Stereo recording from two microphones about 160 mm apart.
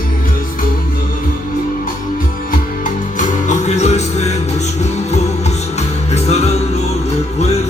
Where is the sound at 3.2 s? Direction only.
50° left (ahead or behind).